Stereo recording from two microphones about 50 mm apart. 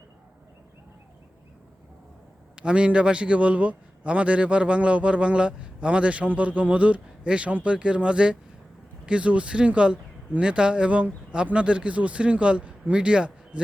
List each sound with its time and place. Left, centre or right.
2.6 s a man's voice: right